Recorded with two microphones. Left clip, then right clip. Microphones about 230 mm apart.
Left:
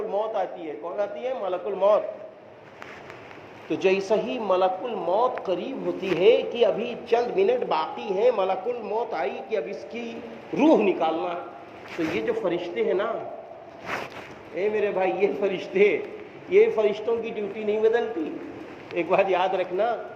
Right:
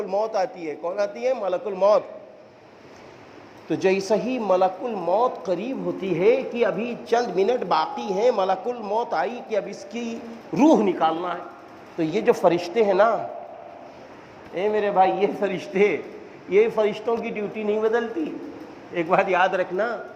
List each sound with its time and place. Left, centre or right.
0.1 s a man's voice: right
3.7 s a man's voice: right
14.5 s a man's voice: right